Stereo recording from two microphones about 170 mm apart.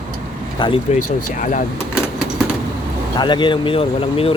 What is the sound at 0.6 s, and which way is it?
Speech, 30° left (ahead or behind).